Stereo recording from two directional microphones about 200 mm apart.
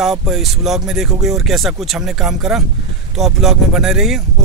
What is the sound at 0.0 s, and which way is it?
Speech, centre (ahead or behind).